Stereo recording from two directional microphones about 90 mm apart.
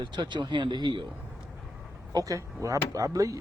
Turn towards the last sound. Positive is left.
turn(degrees=-40)  # may be behind; listen again after turning